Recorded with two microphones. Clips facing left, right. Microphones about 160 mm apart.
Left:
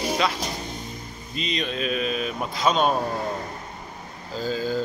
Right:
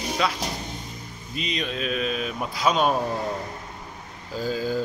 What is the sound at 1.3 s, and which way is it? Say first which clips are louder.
A man's voice: left 1 dB; 5° right (ahead or behind).